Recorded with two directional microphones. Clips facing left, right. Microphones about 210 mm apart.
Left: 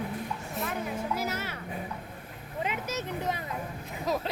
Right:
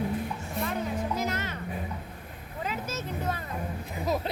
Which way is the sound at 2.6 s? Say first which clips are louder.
Even; 15° left (ahead or behind).